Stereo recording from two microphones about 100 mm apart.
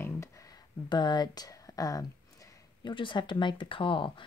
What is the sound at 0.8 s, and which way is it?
Speech, 45° left (ahead or behind).